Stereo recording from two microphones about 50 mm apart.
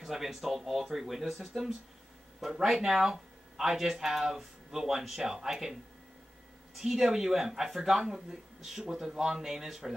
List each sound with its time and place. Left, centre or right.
0.0 s speech: centre